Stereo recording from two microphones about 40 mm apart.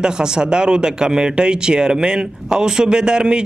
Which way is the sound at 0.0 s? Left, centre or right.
Centre.